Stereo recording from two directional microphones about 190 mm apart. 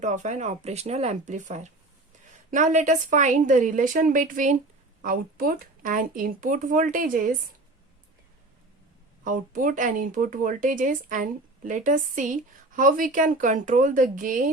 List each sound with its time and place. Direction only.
0.0 s a woman's voice: 40° right (ahead or behind)
9.2 s speech: 45° right (ahead or behind)